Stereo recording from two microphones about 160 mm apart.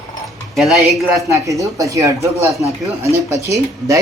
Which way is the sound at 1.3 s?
20° right (ahead or behind).